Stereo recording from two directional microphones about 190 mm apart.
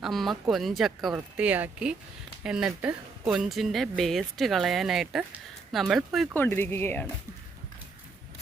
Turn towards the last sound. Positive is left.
turn(degrees=10)  # may be behind; listen again after turning